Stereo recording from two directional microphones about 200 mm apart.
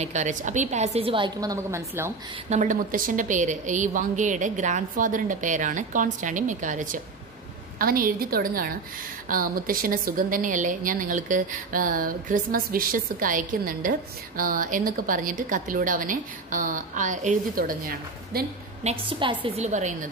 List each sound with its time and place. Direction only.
0.0 s a woman's voice: 35° right (ahead or behind); by 2.1 s 15° right (ahead or behind)
2.5 s a woman's voice: 40° right (ahead or behind)
18.9 s a woman's voice: 25° right (ahead or behind)